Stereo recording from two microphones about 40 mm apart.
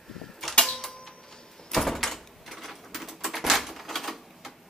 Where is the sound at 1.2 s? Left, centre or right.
Centre.